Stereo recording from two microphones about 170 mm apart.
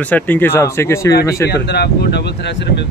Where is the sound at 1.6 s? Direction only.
75° left (ahead or behind).